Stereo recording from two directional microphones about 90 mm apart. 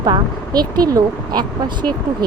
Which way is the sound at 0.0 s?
50° right (ahead or behind).